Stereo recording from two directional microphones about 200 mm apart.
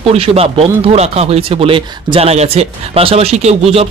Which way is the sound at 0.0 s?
30° right (ahead or behind).